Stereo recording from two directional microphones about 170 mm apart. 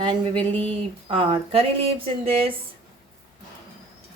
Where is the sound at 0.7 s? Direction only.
35° right (ahead or behind).